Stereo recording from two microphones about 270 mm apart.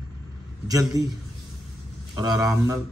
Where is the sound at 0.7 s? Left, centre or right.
Centre.